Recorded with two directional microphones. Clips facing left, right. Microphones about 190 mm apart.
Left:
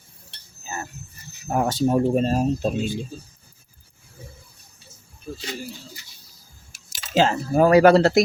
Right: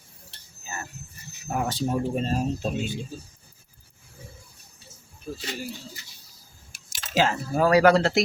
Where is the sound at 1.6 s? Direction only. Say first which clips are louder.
Left 7 dB; 45° left (ahead or behind).